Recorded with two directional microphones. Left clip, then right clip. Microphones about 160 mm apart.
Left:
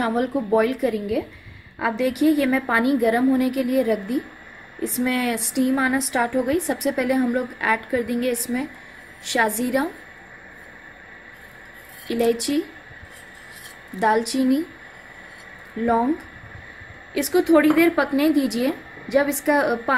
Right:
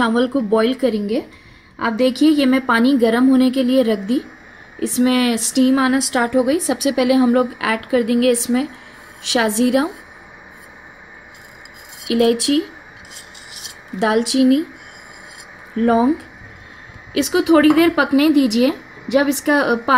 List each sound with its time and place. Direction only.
0.0 s a woman's voice: 50° right (ahead or behind)
12.1 s a woman's voice: 50° right (ahead or behind)
13.9 s a woman's voice: 50° right (ahead or behind)
17.1 s a woman's voice: 55° right (ahead or behind)